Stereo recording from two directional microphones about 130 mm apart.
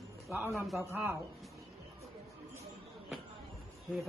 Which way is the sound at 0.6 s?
Centre (ahead or behind).